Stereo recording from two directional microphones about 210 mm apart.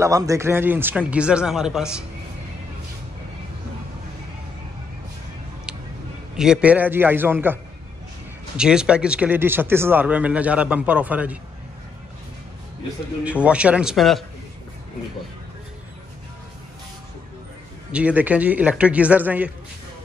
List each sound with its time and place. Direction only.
0.0 s speech: 15° right (ahead or behind)
5.7 s a sound: 5° right (ahead or behind)
6.3 s speech: 5° right (ahead or behind)
8.5 s speech: 5° right (ahead or behind)
13.2 s a man's voice: 5° right (ahead or behind)
17.9 s speech: 5° right (ahead or behind)